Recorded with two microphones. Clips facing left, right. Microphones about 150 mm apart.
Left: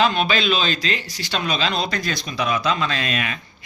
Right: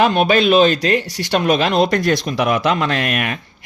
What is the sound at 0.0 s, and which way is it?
Speech, 55° right (ahead or behind).